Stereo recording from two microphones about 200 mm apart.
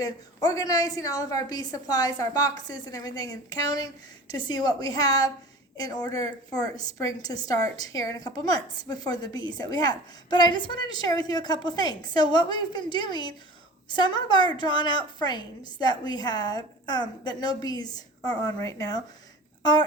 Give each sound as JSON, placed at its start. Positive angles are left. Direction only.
{"t": 0.0, "sound": "a woman's voice", "side_deg": 20}